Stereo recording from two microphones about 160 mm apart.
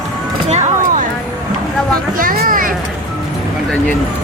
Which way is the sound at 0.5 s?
45° right (ahead or behind).